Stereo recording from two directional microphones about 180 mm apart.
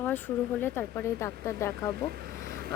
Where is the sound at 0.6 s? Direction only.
10° left (ahead or behind).